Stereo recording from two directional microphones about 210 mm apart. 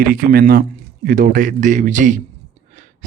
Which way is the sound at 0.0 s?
45° right (ahead or behind).